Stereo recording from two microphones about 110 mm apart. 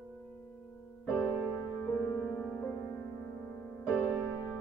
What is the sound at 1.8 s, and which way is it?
Music, 30° left (ahead or behind).